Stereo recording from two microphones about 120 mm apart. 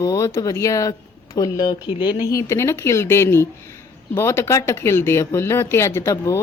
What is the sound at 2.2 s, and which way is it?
Speech, 25° left (ahead or behind).